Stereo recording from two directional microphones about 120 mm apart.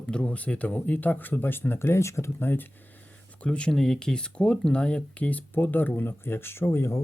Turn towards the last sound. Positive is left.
turn(degrees=20)  # may be behind; listen again after turning